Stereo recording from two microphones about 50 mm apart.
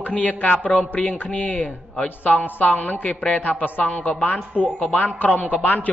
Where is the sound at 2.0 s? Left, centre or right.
Left.